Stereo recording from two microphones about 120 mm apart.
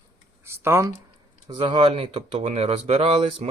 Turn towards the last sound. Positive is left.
turn(degrees=-45)  # may be behind; listen again after turning